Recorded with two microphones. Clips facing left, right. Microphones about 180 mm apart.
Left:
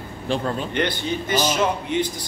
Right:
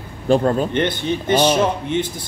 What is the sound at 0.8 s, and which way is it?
Speech, 25° right (ahead or behind).